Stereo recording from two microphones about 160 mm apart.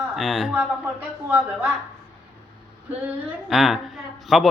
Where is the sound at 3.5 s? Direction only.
Centre (ahead or behind).